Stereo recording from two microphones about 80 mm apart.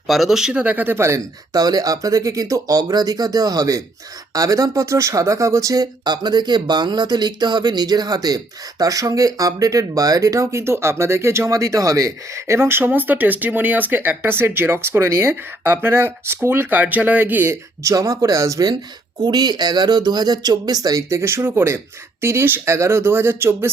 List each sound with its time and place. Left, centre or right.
0.1 s speech: centre
0.6 s speech: centre
0.9 s speech: right
1.5 s speech: right
17.8 s speech: right
19.2 s speech: right
21.2 s speech: right